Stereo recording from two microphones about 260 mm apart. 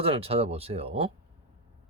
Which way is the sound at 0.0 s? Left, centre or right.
Right.